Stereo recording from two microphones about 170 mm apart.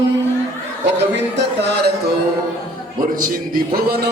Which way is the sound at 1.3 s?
85° right.